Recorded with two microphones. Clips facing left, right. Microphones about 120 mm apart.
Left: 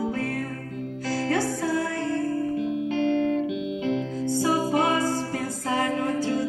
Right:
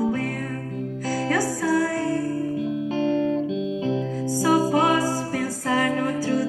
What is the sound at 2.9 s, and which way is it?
Music, 35° right (ahead or behind).